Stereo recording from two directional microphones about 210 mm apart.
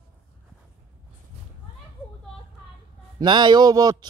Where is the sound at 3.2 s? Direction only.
20° right (ahead or behind).